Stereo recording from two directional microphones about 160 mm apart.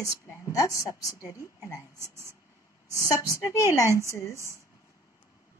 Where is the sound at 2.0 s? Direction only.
15° right (ahead or behind).